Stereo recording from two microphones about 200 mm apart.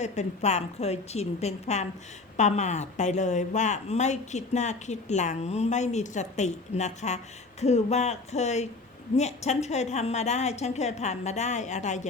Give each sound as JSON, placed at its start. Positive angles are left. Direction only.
{"t": 0.0, "sound": "a woman's voice", "side_deg": 35}